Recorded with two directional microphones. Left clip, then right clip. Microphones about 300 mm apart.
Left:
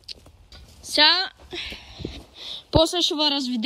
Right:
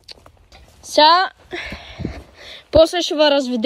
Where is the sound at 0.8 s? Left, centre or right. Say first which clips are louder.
Right 6 dB; centre.